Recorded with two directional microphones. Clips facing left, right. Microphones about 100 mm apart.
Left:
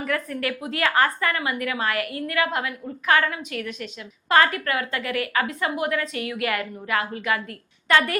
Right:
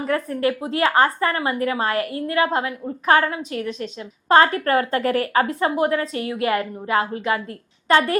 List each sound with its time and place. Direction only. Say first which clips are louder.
0.0 s a woman's voice: right 5 dB; 30° right (ahead or behind)